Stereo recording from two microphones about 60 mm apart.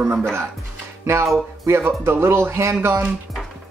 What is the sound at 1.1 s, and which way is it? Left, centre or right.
Speech, right.